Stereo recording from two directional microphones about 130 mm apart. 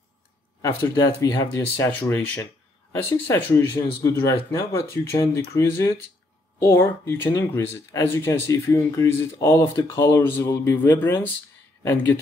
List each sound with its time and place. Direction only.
0.8 s speech: 25° left (ahead or behind)